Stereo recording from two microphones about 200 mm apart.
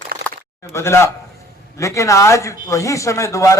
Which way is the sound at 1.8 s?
15° left (ahead or behind).